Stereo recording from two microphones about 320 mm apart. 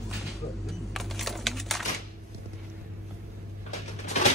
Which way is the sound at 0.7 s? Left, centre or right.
Centre.